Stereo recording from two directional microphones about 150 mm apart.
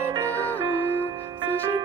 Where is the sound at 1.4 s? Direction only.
15° right (ahead or behind).